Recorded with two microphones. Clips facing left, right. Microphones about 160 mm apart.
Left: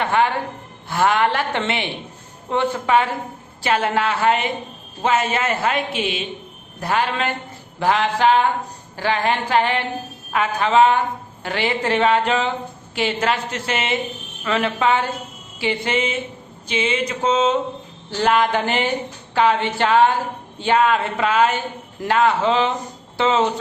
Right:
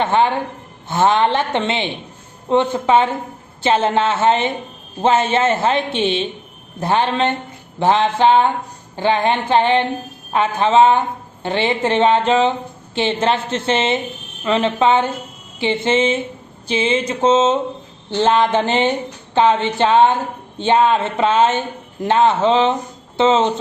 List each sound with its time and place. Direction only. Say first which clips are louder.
0.0 s a woman's voice: right 3 dB; 25° right (ahead or behind)